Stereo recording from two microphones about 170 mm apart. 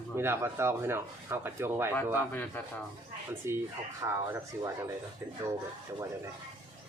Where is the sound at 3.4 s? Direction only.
15° right (ahead or behind).